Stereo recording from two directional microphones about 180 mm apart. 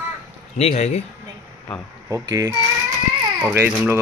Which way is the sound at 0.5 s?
40° left (ahead or behind).